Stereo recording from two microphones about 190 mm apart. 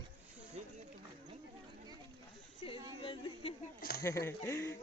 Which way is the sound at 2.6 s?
30° left (ahead or behind).